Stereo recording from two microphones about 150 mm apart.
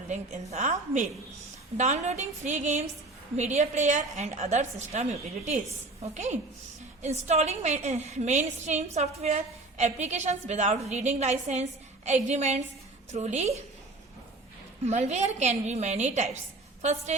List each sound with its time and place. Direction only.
0.5 s a woman's voice: 50° right (ahead or behind)
14.8 s a woman's voice: 50° right (ahead or behind)